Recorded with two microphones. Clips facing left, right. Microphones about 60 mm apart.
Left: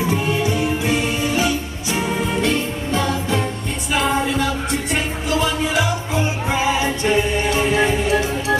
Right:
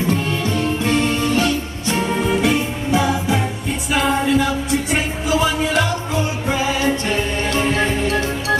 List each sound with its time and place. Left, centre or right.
0.1 s music: centre
6.1 s music: left
7.2 s music: centre